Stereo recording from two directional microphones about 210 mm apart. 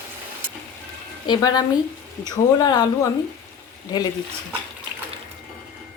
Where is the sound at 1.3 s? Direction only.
20° left (ahead or behind).